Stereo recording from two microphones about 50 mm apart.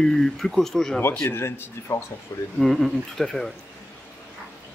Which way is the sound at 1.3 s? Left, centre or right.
Left.